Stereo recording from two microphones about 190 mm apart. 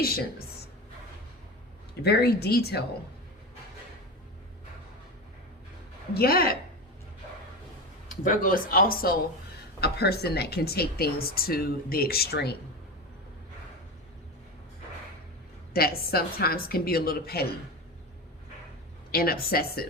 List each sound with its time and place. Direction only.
0.0 s a woman's voice: 55° left (ahead or behind)
2.0 s speech: 60° left (ahead or behind)
6.1 s a woman's voice: 50° left (ahead or behind)
8.2 s a woman's voice: 45° left (ahead or behind)
15.7 s a woman's voice: 55° left (ahead or behind)
19.1 s a woman's voice: 50° left (ahead or behind)